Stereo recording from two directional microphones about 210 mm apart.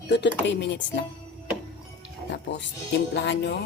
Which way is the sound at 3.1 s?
55° left (ahead or behind).